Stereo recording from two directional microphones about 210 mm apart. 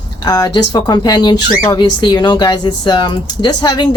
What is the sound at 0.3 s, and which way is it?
Speech, 20° left (ahead or behind).